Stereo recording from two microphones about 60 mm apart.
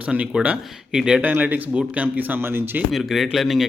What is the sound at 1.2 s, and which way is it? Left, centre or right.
A man's voice, right.